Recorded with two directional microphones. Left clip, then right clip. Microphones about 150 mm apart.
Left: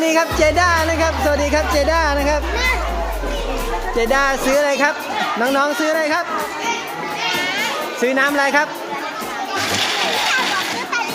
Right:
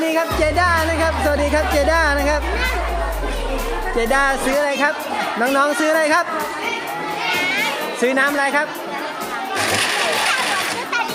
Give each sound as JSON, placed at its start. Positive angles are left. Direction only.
{"t": 0.0, "sound": "speech", "side_deg": 20}
{"t": 3.9, "sound": "speech", "side_deg": 0}
{"t": 4.5, "sound": "a woman's voice", "side_deg": 20}
{"t": 5.4, "sound": "speech", "side_deg": 0}
{"t": 5.8, "sound": "speech", "side_deg": -10}
{"t": 7.4, "sound": "music", "side_deg": 0}
{"t": 8.4, "sound": "a woman's voice", "side_deg": 20}